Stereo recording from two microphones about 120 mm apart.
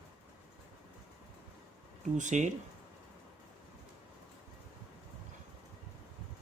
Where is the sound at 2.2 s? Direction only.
90° right.